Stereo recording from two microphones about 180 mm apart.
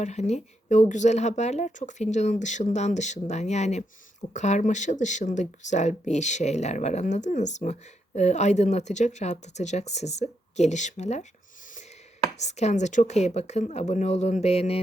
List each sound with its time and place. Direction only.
0.0 s speech: 40° left (ahead or behind)
12.4 s speech: 40° left (ahead or behind)